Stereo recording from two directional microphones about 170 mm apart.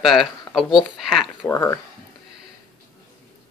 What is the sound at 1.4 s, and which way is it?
Speech, 15° left (ahead or behind).